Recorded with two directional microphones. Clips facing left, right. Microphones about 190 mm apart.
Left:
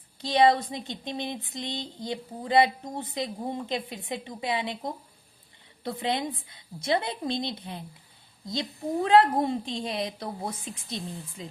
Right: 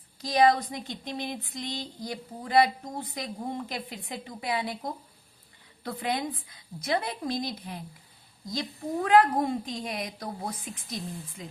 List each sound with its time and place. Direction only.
0.2 s speech: 25° left (ahead or behind)